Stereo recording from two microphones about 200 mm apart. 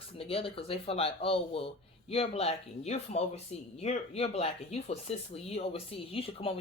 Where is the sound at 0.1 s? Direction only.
30° left (ahead or behind).